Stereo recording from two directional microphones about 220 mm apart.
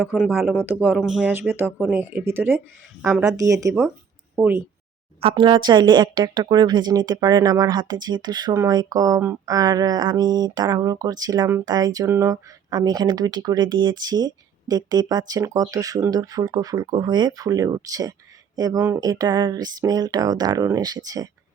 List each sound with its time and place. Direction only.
0.0 s a woman's voice: 10° right (ahead or behind)